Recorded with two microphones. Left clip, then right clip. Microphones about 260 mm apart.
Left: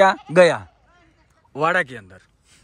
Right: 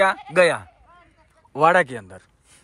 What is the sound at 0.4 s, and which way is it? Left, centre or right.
Speech, centre.